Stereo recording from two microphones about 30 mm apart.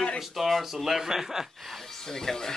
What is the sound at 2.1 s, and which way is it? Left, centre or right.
Speech, centre.